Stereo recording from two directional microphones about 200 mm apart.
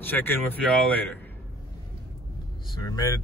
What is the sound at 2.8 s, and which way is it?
Speech, 15° left (ahead or behind).